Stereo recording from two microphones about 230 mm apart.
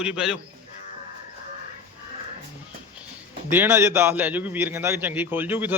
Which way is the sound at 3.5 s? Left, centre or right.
Centre.